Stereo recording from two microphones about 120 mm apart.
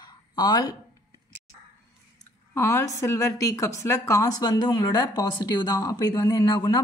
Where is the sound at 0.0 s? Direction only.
35° left (ahead or behind).